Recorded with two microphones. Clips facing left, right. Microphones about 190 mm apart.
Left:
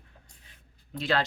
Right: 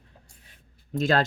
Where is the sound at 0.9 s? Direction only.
45° right (ahead or behind).